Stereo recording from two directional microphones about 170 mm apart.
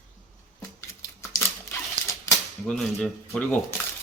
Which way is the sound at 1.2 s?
15° left (ahead or behind).